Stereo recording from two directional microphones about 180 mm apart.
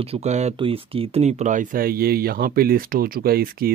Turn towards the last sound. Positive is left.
turn(degrees=-55)  # may be behind; listen again after turning